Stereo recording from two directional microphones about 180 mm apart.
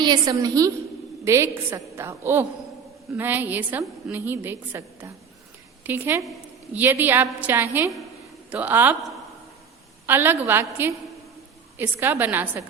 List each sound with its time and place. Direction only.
0.0 s a woman's voice: 25° right (ahead or behind)
10.1 s a woman's voice: 10° right (ahead or behind)